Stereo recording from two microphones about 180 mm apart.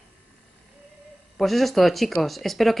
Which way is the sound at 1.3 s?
Centre (ahead or behind).